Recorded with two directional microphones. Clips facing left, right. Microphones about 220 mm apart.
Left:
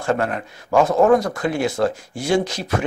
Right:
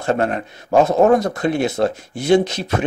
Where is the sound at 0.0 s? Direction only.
25° right (ahead or behind).